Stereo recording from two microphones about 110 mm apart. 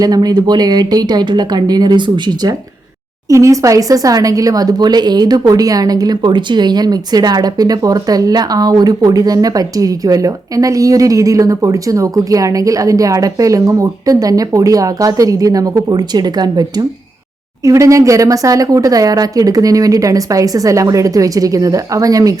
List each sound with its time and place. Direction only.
0.0 s speech: 35° right (ahead or behind)
3.2 s speech: 30° right (ahead or behind)